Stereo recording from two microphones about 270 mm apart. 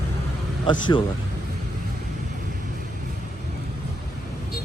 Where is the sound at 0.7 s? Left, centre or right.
Centre.